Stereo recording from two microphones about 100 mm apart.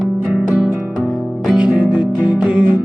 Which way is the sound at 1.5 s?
10° right (ahead or behind).